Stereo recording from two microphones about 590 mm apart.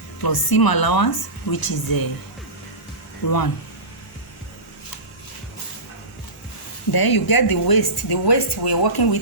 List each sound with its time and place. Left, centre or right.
0.2 s speech: left
3.2 s speech: left
6.9 s speech: left